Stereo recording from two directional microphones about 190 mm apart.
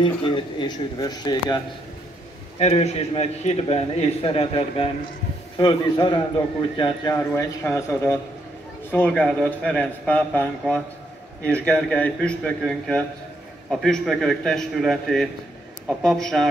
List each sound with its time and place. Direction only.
0.0 s speech: 25° left (ahead or behind)
2.6 s a man's voice: 35° left (ahead or behind); by 16.4 s 5° left (ahead or behind)